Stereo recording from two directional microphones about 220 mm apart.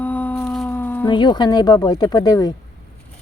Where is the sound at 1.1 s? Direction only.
20° left (ahead or behind).